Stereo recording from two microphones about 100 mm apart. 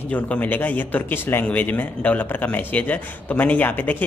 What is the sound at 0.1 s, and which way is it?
Speech, 15° left (ahead or behind).